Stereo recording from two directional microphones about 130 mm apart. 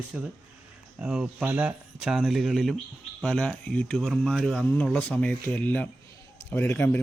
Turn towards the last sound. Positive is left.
turn(degrees=15)  # may be behind; listen again after turning